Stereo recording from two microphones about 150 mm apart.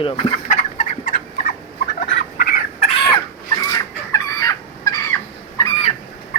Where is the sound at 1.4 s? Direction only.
65° left (ahead or behind).